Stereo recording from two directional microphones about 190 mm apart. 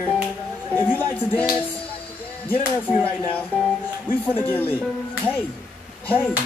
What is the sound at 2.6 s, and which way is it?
Speech, 10° right (ahead or behind).